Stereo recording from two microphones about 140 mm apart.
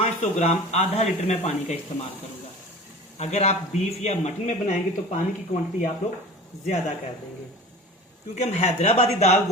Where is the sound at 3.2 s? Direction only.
50° left (ahead or behind).